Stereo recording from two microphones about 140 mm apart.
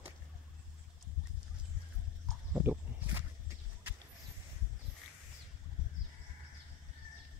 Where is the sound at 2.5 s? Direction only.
15° right (ahead or behind).